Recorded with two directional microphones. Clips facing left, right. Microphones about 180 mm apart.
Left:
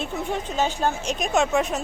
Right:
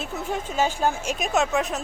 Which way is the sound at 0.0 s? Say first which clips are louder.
Left 2 dB; 5° right (ahead or behind).